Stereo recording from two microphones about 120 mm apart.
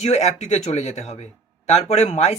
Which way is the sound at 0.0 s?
65° left (ahead or behind).